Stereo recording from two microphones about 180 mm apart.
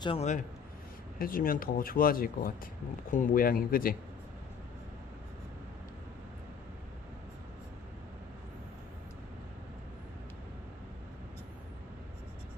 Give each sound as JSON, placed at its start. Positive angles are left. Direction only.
{"t": 0.0, "sound": "speech", "side_deg": 35}
{"t": 1.2, "sound": "speech", "side_deg": 50}